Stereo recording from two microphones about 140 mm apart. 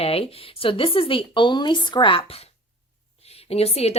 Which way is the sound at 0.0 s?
45° left (ahead or behind).